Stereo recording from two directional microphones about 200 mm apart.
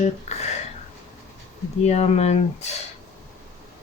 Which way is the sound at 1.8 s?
30° left (ahead or behind).